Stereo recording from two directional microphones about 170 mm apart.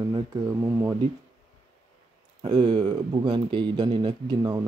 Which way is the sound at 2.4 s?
30° right (ahead or behind).